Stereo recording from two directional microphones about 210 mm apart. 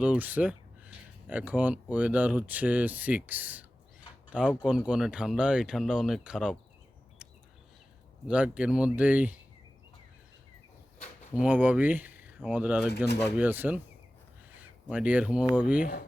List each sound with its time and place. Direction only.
0.0 s speech: 5° right (ahead or behind)
8.3 s speech: 5° right (ahead or behind)
11.3 s speech: 5° right (ahead or behind)
15.8 s speech: 45° left (ahead or behind)